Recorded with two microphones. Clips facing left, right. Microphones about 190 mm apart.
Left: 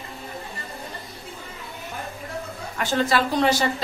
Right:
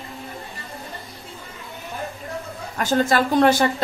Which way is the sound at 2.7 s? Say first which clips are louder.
Right 3 dB; 45° right (ahead or behind).